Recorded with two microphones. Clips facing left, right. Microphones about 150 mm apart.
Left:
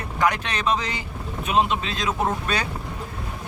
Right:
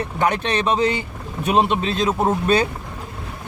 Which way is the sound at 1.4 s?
40° right (ahead or behind).